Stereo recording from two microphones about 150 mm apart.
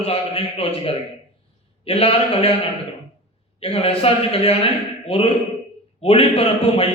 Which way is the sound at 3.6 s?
40° left (ahead or behind).